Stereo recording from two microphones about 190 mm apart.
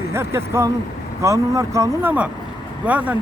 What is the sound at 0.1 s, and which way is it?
Speech, 15° right (ahead or behind).